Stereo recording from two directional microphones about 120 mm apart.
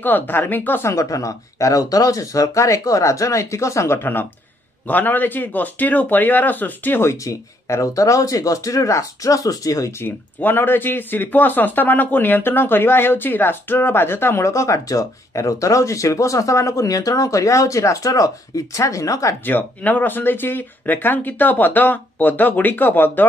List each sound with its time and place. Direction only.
0.0 s a man's voice: 15° left (ahead or behind)
19.4 s speech: 15° left (ahead or behind)